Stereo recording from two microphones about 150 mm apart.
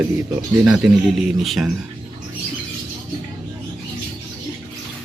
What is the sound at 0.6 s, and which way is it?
Speech, 5° right (ahead or behind).